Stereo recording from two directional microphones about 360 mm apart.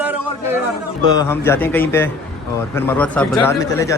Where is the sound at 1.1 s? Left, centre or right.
Centre.